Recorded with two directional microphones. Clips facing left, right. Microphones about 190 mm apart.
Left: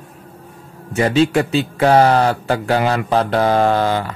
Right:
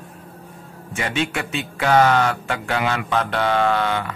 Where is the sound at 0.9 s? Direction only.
35° left (ahead or behind).